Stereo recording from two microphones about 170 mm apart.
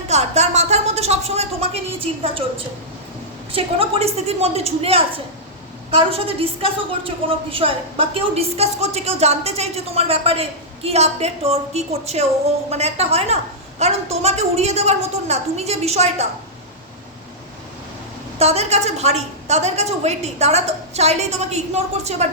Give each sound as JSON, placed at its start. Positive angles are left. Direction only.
{"t": 0.1, "sound": "a sound", "side_deg": -40}
{"t": 3.5, "sound": "a woman's voice", "side_deg": -35}
{"t": 18.3, "sound": "a woman's voice", "side_deg": -40}